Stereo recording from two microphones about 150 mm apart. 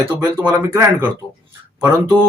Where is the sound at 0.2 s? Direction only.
25° right (ahead or behind).